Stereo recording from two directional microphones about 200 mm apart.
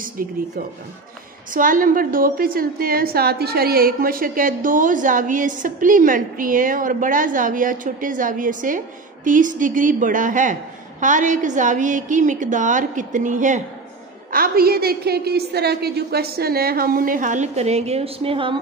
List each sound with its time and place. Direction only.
0.2 s a woman's voice: 45° right (ahead or behind)
1.5 s a woman's voice: 45° right (ahead or behind); by 18.6 s 25° right (ahead or behind)